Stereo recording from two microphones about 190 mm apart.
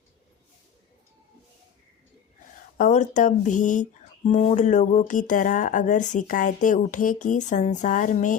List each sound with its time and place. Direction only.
2.7 s speech: 40° left (ahead or behind)